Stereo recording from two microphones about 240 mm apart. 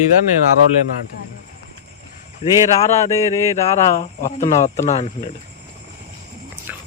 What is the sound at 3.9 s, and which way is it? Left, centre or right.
Speech, left.